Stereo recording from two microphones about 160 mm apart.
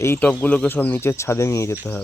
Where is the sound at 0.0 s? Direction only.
15° left (ahead or behind).